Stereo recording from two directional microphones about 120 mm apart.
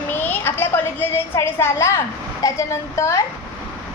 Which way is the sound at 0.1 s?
15° left (ahead or behind).